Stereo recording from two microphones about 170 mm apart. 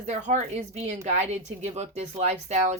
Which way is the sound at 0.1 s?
40° right (ahead or behind).